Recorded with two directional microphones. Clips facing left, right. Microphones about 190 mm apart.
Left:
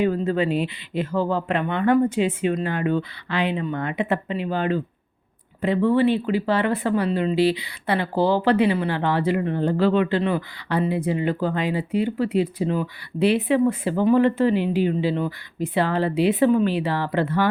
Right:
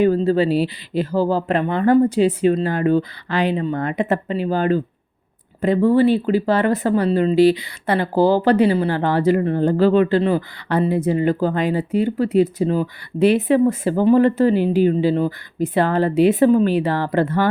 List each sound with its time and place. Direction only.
0.2 s speech: 35° right (ahead or behind)